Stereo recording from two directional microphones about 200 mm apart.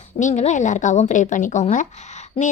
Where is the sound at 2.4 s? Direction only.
25° left (ahead or behind).